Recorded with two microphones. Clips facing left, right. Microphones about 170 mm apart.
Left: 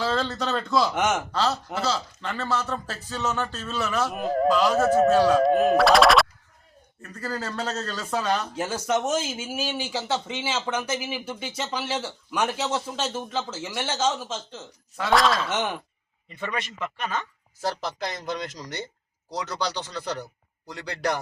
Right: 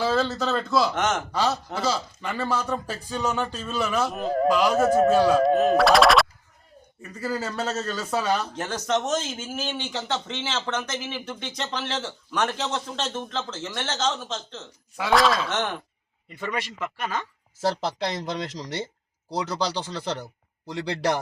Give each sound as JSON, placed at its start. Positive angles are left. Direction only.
{"t": 0.0, "sound": "speech", "side_deg": -5}
{"t": 0.9, "sound": "speech", "side_deg": 10}
{"t": 1.3, "sound": "speech", "side_deg": -10}
{"t": 4.1, "sound": "speech", "side_deg": 5}
{"t": 8.5, "sound": "speech", "side_deg": 10}
{"t": 17.0, "sound": "speech", "side_deg": -10}
{"t": 17.6, "sound": "speech", "side_deg": -30}
{"t": 19.9, "sound": "speech", "side_deg": -25}